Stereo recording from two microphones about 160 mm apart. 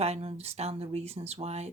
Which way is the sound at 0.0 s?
40° right (ahead or behind).